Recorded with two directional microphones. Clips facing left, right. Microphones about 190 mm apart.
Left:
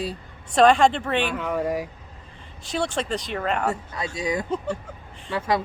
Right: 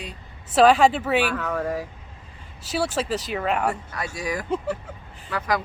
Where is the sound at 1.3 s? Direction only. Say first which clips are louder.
Left 1 dB; 10° left (ahead or behind).